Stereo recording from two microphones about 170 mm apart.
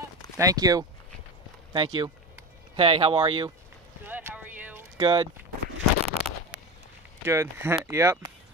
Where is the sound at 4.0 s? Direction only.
10° right (ahead or behind).